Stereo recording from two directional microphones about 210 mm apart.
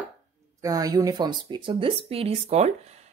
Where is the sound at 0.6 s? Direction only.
15° right (ahead or behind).